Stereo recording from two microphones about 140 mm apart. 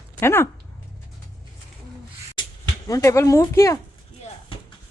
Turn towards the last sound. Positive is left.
turn(degrees=20)  # may be behind; listen again after turning